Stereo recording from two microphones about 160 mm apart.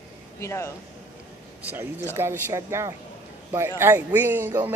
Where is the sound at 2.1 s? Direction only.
15° right (ahead or behind).